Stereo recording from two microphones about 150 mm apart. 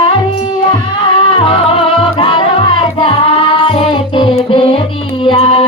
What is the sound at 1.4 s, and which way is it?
Music, 40° left (ahead or behind).